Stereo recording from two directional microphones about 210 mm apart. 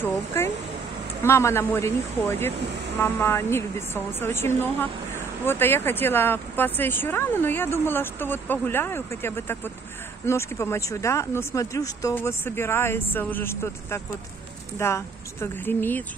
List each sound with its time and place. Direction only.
0.0 s speech: 10° left (ahead or behind)